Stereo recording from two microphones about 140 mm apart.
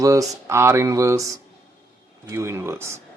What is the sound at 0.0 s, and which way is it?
Speech, 25° right (ahead or behind).